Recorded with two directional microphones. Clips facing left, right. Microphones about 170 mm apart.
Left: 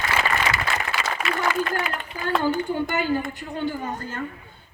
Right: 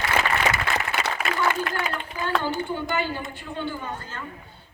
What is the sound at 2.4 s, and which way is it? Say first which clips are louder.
A woman's voice: left 4 dB; 50° left (ahead or behind).